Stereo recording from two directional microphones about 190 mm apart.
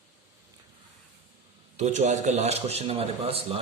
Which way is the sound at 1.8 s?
40° right (ahead or behind).